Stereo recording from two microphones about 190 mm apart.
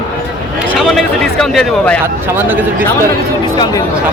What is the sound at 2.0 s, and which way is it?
Speech, 10° right (ahead or behind).